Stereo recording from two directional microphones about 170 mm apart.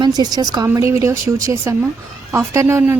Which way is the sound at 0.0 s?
25° right (ahead or behind).